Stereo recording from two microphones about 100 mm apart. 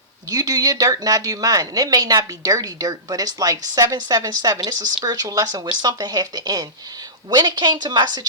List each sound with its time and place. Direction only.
0.3 s a woman's voice: 40° right (ahead or behind)